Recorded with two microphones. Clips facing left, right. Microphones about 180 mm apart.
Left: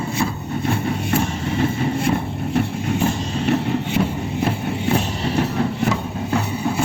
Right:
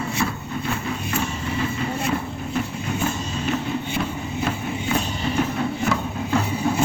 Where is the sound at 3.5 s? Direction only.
70° left (ahead or behind).